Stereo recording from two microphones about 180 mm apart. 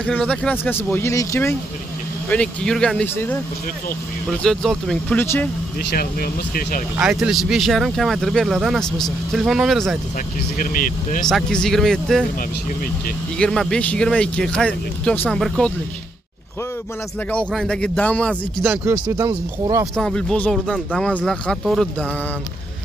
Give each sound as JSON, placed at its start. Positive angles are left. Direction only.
{"t": 0.0, "sound": "speech", "side_deg": 5}
{"t": 5.2, "sound": "speech", "side_deg": 15}
{"t": 5.9, "sound": "speech", "side_deg": 55}
{"t": 7.0, "sound": "speech", "side_deg": -5}
{"t": 10.6, "sound": "speech", "side_deg": 50}
{"t": 11.2, "sound": "speech", "side_deg": 5}
{"t": 13.4, "sound": "speech", "side_deg": 5}
{"t": 17.3, "sound": "speech", "side_deg": 5}
{"t": 18.6, "sound": "speech", "side_deg": -15}
{"t": 20.0, "sound": "speech", "side_deg": 5}